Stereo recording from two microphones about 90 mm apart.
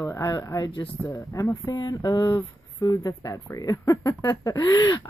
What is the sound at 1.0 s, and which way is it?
Speech, 35° left (ahead or behind).